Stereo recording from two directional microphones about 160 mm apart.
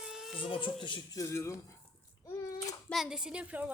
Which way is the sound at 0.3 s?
35° left (ahead or behind).